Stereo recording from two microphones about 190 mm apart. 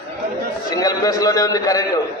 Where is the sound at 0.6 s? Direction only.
20° left (ahead or behind).